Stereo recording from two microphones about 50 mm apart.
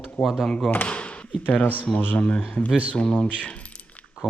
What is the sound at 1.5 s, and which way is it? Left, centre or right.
Speech, left.